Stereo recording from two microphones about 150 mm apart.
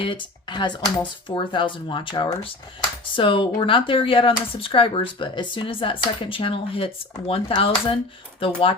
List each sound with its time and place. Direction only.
0.0 s speech: 35° left (ahead or behind)